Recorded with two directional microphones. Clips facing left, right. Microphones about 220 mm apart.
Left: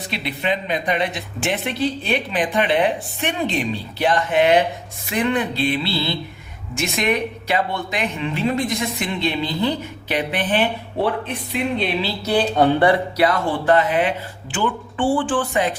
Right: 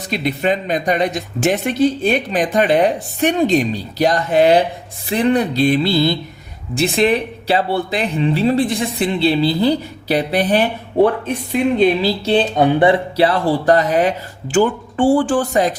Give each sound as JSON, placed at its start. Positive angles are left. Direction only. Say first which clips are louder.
{"t": 0.1, "sound": "speech", "louder": "right 6 dB", "side_deg": -45}
{"t": 6.7, "sound": "speech", "louder": "right 6 dB", "side_deg": -30}
{"t": 12.2, "sound": "speech", "louder": "right 1 dB", "side_deg": -20}